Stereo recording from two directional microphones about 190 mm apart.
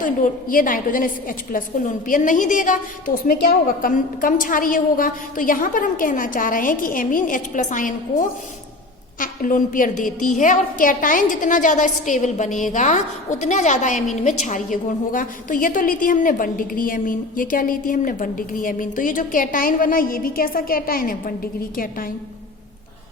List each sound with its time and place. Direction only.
0.0 s a woman's voice: 45° left (ahead or behind)